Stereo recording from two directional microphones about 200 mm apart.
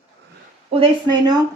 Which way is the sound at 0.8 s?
20° right (ahead or behind).